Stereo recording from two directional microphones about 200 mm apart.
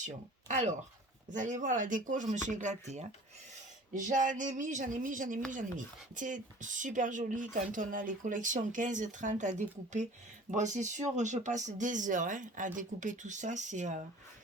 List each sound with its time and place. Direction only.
0.0 s speech: 35° right (ahead or behind)